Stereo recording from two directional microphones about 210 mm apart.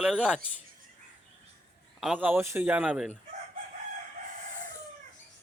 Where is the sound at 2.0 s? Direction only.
5° right (ahead or behind).